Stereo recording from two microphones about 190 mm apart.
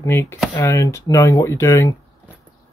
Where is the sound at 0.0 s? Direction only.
15° left (ahead or behind).